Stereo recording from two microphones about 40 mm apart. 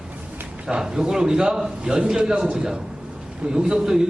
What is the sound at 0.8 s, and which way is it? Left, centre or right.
A man's voice, centre.